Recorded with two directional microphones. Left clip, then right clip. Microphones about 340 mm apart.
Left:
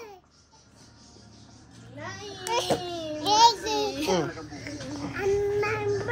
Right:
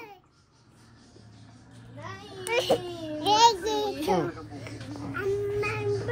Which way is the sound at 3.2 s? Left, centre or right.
Right.